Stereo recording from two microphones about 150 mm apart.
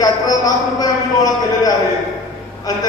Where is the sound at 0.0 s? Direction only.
25° left (ahead or behind).